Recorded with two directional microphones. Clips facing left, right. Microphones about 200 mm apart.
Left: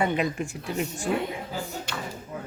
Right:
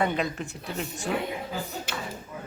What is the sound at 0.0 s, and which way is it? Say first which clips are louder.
Speech: left 2 dB; 10° left (ahead or behind).